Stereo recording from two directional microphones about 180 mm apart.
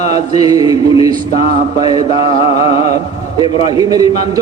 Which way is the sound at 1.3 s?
35° left (ahead or behind).